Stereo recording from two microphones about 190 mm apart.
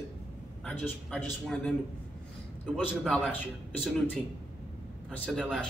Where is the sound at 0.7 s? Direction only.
5° left (ahead or behind).